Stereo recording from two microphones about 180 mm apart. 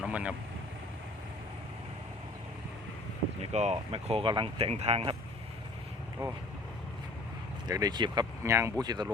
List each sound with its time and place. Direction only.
0.0 s speech: 5° right (ahead or behind)
3.5 s speech: 40° right (ahead or behind)
7.7 s speech: 20° right (ahead or behind)